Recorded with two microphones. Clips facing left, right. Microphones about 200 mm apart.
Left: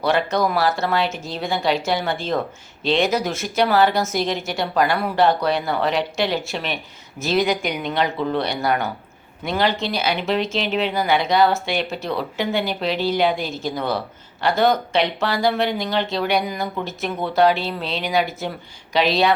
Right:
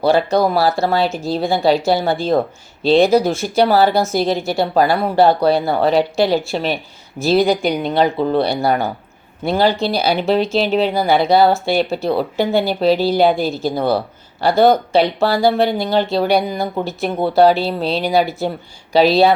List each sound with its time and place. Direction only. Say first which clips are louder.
0.0 s speech: right 5 dB; 30° right (ahead or behind)